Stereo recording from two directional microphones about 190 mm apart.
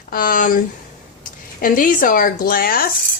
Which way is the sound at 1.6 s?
45° left (ahead or behind).